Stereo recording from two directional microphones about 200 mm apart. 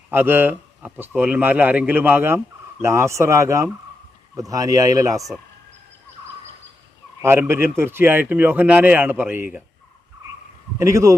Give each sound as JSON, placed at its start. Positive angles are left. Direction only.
{"t": 0.1, "sound": "speech", "side_deg": -10}
{"t": 7.2, "sound": "speech", "side_deg": -10}
{"t": 10.8, "sound": "speech", "side_deg": -15}